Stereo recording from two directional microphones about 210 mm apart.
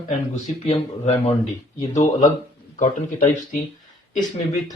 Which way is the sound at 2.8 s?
40° left (ahead or behind).